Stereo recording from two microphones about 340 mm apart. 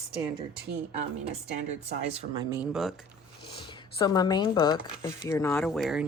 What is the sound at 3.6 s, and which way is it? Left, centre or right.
Speech, centre.